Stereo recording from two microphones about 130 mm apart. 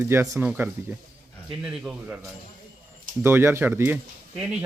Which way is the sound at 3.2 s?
20° right (ahead or behind).